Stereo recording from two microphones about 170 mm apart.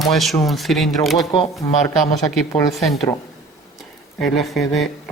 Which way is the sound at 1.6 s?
20° left (ahead or behind).